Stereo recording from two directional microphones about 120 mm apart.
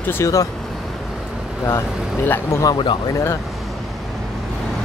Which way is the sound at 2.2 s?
20° left (ahead or behind).